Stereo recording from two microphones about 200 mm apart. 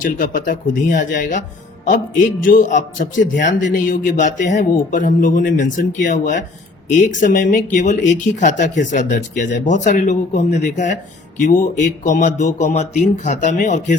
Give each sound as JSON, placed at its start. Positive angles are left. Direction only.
{"t": 0.0, "sound": "speech", "side_deg": 40}